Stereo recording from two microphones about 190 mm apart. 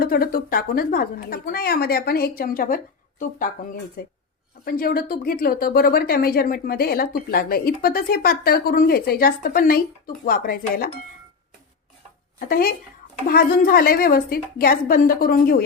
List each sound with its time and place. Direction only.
0.0 s speech: 50° left (ahead or behind)
12.5 s speech: 50° left (ahead or behind)